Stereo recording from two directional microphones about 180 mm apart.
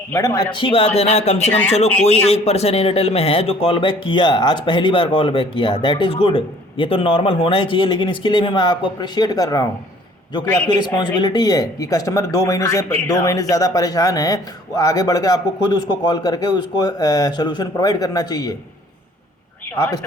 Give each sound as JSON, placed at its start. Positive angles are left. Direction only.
{"t": 0.1, "sound": "speech", "side_deg": 15}
{"t": 10.8, "sound": "speech", "side_deg": 25}